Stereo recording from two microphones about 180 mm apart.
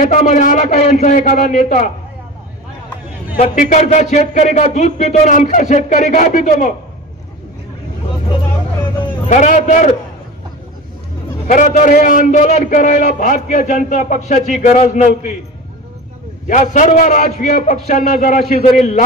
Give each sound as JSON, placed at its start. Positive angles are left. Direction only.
{"t": 0.0, "sound": "a man's voice", "side_deg": 45}
{"t": 3.3, "sound": "a man's voice", "side_deg": 45}
{"t": 9.3, "sound": "a man's voice", "side_deg": 45}
{"t": 11.5, "sound": "a man's voice", "side_deg": 45}
{"t": 16.4, "sound": "a man's voice", "side_deg": 45}